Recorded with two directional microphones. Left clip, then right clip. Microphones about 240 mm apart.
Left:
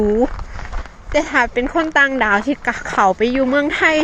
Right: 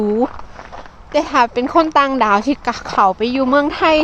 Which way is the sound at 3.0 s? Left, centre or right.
Centre.